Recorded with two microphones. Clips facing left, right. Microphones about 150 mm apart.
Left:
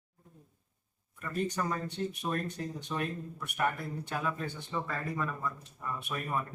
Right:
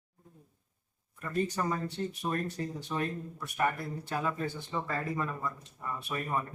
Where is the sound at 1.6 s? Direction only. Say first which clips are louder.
Even; 5° right (ahead or behind).